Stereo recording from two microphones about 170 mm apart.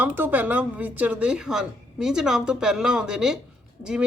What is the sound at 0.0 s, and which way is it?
A woman's voice, 10° right (ahead or behind).